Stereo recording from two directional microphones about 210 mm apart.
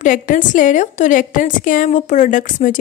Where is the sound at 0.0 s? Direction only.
40° left (ahead or behind).